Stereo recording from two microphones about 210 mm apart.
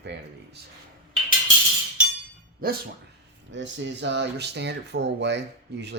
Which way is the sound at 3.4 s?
60° right (ahead or behind).